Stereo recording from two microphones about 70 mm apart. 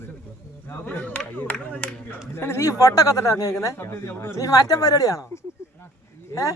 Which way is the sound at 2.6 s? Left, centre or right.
Left.